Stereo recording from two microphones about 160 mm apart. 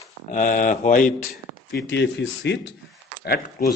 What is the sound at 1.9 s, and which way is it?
Speech, 90° left.